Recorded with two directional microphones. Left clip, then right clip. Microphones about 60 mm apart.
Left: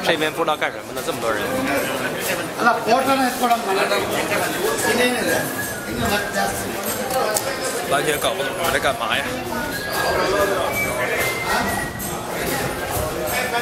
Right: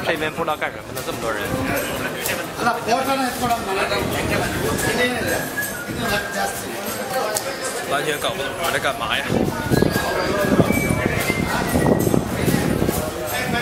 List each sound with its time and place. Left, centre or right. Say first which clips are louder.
0.0 s a man's voice: left 2 dB; centre
2.6 s a man's voice: left 3 dB; right
3.7 s speech: left 2 dB; centre
7.9 s speech: left 2 dB; centre